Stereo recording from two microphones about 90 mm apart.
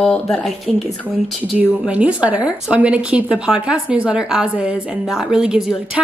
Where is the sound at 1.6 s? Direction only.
15° right (ahead or behind).